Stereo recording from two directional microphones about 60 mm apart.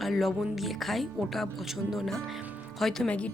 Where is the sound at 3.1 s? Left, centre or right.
Centre.